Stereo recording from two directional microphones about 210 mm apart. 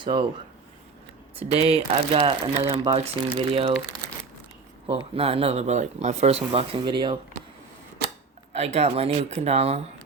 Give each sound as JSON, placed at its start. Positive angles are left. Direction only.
{"t": 0.0, "sound": "speech", "side_deg": -25}
{"t": 1.4, "sound": "speech", "side_deg": -30}
{"t": 4.9, "sound": "speech", "side_deg": -25}
{"t": 8.5, "sound": "speech", "side_deg": -30}